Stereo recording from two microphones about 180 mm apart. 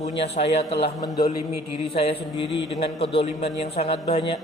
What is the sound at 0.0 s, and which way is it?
Speech, 40° left (ahead or behind).